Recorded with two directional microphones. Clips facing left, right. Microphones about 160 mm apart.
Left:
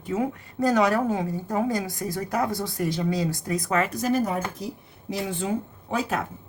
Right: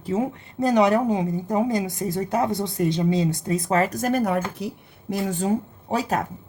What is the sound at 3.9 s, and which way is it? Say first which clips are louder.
Speech: right 2 dB; 55° right (ahead or behind).